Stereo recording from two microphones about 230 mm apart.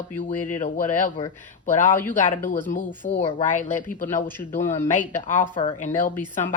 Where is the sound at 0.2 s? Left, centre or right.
Left.